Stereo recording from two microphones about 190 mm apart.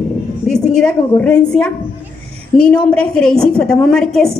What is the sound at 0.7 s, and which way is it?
A woman's voice, 5° left (ahead or behind).